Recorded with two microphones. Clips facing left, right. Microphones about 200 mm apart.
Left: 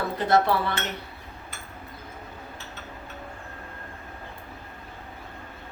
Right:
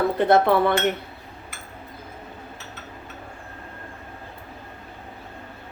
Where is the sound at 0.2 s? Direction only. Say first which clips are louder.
Right 4 dB; 55° right (ahead or behind).